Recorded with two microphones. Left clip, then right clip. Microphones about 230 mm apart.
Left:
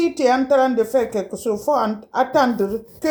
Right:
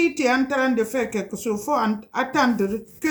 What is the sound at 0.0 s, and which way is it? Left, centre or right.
Speech, right.